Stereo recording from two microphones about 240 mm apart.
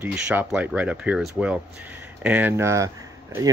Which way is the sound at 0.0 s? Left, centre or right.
Centre.